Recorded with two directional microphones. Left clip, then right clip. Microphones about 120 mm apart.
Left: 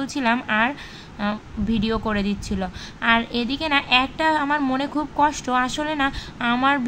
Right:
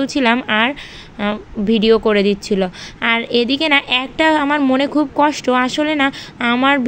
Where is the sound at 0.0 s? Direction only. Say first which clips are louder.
Right 7 dB; 40° right (ahead or behind).